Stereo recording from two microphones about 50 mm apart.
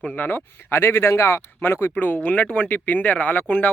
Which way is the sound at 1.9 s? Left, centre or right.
Left.